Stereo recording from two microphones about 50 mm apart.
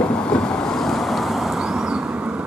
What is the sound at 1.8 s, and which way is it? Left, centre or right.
Vehicle, centre.